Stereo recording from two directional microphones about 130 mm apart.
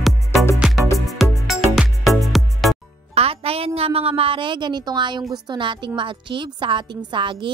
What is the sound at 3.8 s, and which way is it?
A woman's voice, 50° right (ahead or behind).